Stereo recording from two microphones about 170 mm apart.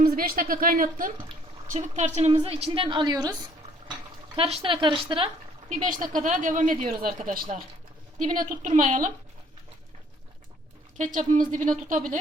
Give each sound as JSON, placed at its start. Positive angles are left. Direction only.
{"t": 0.0, "sound": "a woman's voice", "side_deg": -60}
{"t": 4.4, "sound": "a woman's voice", "side_deg": -30}
{"t": 5.6, "sound": "speech", "side_deg": -45}
{"t": 10.9, "sound": "speech", "side_deg": -50}